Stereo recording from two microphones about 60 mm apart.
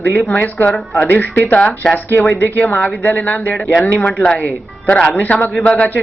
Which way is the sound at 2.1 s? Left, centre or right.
Left.